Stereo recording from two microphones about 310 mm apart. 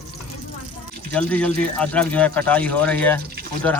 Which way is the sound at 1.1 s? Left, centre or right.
Centre.